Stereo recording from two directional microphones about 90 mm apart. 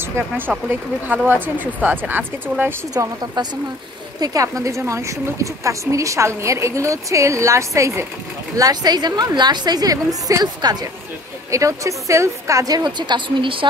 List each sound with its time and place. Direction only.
0.0 s speech: 25° right (ahead or behind)
2.9 s a woman's voice: 45° right (ahead or behind)
8.5 s a woman's voice: 45° right (ahead or behind)
11.5 s a woman's voice: 35° right (ahead or behind); by 13.7 s 70° right (ahead or behind)